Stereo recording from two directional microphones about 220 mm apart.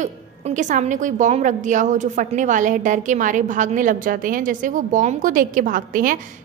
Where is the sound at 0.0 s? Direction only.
30° right (ahead or behind).